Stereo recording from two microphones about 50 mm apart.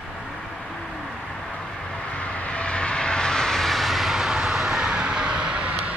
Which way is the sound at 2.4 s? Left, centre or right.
Left.